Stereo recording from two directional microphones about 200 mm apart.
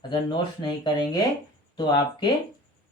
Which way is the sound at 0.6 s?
20° left (ahead or behind).